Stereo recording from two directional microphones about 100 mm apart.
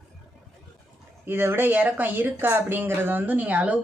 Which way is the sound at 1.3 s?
20° right (ahead or behind).